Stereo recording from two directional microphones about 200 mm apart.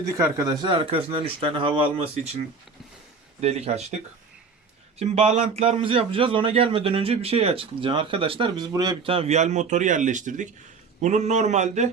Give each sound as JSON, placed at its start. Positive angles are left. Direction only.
{"t": 0.2, "sound": "a man's voice", "side_deg": -15}
{"t": 3.4, "sound": "a man's voice", "side_deg": -35}
{"t": 4.9, "sound": "a man's voice", "side_deg": -30}